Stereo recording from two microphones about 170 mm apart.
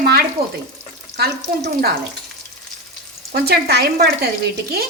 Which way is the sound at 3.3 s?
70° right (ahead or behind).